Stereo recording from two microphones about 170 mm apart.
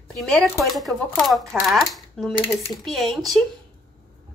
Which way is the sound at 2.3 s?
30° left (ahead or behind).